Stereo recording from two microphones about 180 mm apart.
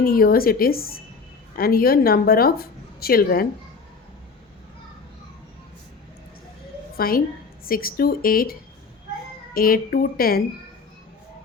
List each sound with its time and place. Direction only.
0.0 s a woman's voice: 55° left (ahead or behind)
6.9 s a woman's voice: 55° left (ahead or behind)
9.6 s a woman's voice: 55° left (ahead or behind)